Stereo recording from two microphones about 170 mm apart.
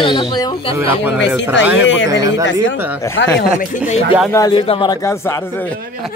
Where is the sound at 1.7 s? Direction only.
90° left.